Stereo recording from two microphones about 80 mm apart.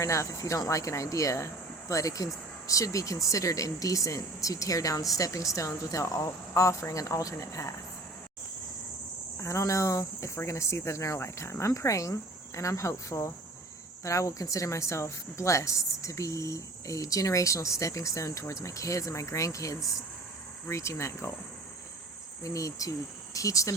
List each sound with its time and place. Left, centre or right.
0.0 s speech: left
9.4 s speech: left
22.4 s speech: left